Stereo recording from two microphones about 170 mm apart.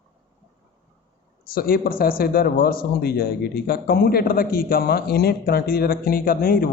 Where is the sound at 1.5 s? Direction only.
60° left (ahead or behind).